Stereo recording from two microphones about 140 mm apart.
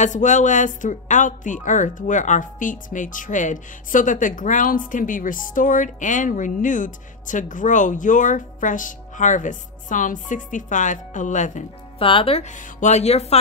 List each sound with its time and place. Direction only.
0.0 s a woman's voice: 60° left (ahead or behind)
12.0 s speech: 40° left (ahead or behind)
12.5 s speech: 55° left (ahead or behind)